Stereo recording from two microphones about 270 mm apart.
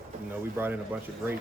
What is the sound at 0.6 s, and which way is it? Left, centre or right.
Speech, centre.